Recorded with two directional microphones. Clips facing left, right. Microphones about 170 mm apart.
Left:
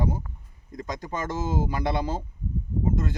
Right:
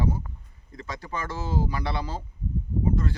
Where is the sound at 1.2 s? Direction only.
20° left (ahead or behind).